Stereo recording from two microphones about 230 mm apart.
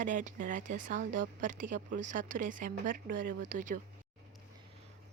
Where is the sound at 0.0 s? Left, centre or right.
Right.